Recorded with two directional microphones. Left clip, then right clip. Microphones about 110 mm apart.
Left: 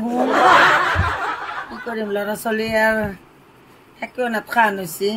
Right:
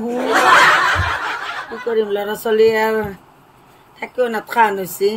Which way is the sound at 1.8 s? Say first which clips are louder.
Right 6 dB; 40° right (ahead or behind).